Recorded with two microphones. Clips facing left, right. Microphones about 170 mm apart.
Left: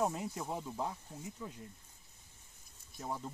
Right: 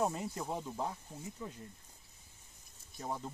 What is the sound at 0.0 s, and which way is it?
Speech, 5° left (ahead or behind).